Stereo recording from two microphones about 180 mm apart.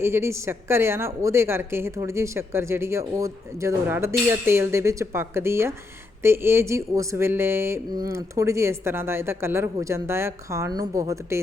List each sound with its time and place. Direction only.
0.0 s a woman's voice: 15° right (ahead or behind)